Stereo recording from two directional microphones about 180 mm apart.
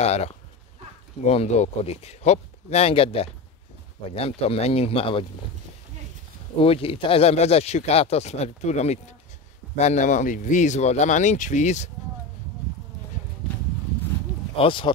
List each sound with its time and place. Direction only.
0.0 s speech: 35° left (ahead or behind)
6.6 s speech: 30° left (ahead or behind)
14.6 s speech: 30° left (ahead or behind)